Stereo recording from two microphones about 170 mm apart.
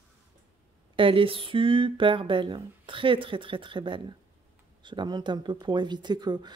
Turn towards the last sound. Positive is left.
turn(degrees=-25)  # may be behind; listen again after turning